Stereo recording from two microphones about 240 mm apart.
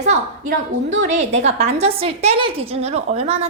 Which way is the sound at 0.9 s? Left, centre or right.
Right.